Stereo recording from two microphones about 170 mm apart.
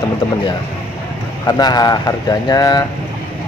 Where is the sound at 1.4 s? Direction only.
25° left (ahead or behind).